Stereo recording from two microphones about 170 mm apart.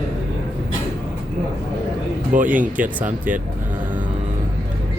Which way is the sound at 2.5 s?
10° right (ahead or behind).